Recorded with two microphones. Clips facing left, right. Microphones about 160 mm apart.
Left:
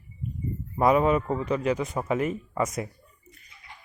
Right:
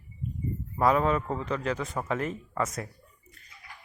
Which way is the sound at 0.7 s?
10° left (ahead or behind).